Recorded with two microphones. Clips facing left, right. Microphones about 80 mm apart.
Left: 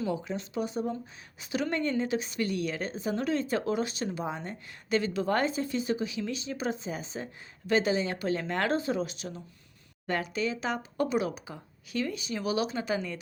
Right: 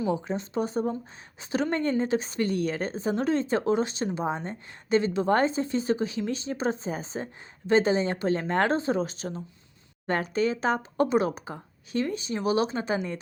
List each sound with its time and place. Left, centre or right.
0.1 s a woman's voice: right